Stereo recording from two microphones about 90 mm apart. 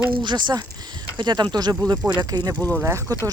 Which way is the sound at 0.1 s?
60° right (ahead or behind).